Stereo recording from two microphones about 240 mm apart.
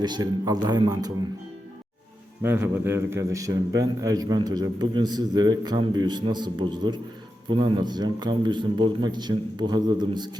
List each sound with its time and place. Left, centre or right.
0.0 s a man's voice: centre
2.4 s a man's voice: centre